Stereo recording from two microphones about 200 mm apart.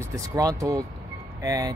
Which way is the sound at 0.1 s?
15° right (ahead or behind).